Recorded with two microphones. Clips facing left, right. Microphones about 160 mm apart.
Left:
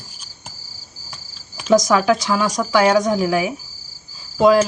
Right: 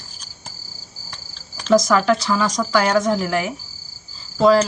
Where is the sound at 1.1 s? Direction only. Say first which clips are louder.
Even; 10° left (ahead or behind).